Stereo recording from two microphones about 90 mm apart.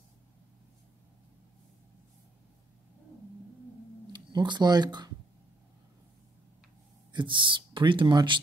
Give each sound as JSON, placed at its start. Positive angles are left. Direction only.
{"t": 4.1, "sound": "speech", "side_deg": -55}
{"t": 7.1, "sound": "speech", "side_deg": -65}